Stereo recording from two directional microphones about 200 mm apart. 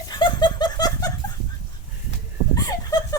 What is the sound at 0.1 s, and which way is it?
Laughter, 25° left (ahead or behind).